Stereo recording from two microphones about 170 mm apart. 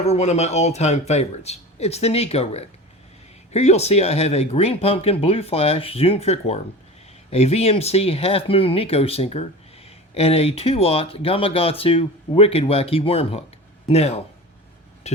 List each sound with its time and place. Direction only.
0.0 s speech: 40° left (ahead or behind)
15.1 s vehicle: 40° left (ahead or behind)